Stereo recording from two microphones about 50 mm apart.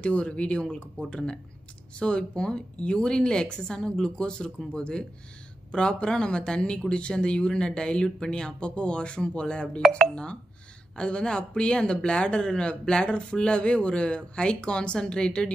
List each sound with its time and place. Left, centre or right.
0.0 s speech: left
11.0 s speech: left